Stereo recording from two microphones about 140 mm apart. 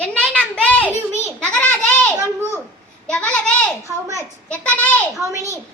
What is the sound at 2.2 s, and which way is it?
Speech, 20° right (ahead or behind).